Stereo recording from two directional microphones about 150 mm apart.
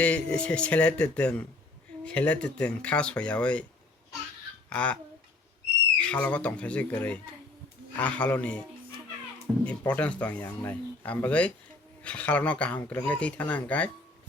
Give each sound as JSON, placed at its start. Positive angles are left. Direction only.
{"t": 0.0, "sound": "speech", "side_deg": 10}
{"t": 4.7, "sound": "speech", "side_deg": 10}
{"t": 6.0, "sound": "speech", "side_deg": 10}
{"t": 9.6, "sound": "speech", "side_deg": 10}